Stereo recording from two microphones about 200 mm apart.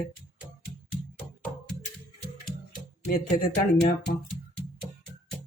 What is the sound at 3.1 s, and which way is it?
Speech, 40° left (ahead or behind).